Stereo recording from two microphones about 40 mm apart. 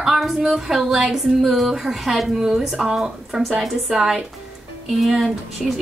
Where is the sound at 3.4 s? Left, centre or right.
Centre.